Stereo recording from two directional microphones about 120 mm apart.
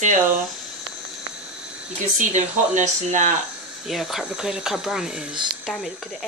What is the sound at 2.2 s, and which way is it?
Speech, 85° right.